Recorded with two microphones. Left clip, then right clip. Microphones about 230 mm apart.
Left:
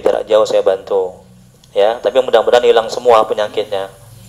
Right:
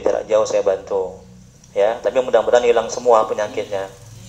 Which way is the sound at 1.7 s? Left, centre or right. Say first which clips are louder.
Left 5 dB; left.